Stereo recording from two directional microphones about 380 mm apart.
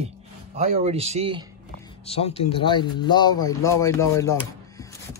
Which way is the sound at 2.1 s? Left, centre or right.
Centre.